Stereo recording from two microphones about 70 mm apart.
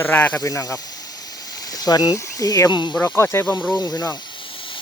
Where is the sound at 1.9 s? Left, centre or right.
Left.